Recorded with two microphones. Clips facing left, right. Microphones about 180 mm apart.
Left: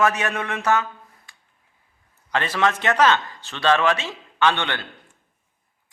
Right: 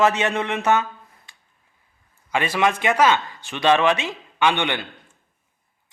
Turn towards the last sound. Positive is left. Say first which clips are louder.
# right 1 dB
turn(degrees=-15)  # may be behind; listen again after turning